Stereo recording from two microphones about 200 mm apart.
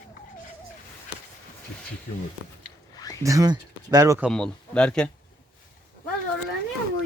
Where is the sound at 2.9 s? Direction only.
20° left (ahead or behind).